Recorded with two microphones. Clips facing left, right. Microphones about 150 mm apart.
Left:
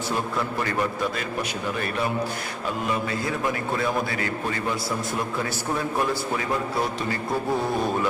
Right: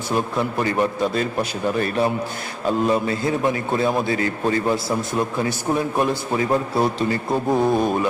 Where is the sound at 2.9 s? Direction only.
30° right (ahead or behind).